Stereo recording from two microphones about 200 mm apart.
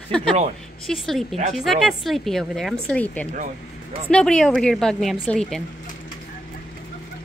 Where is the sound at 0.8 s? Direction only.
Centre (ahead or behind).